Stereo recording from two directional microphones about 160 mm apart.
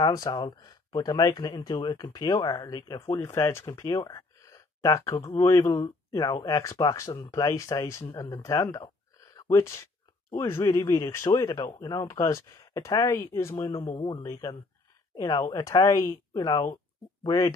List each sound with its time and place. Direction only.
0.0 s speech: 25° left (ahead or behind)
14.2 s speech: 25° left (ahead or behind)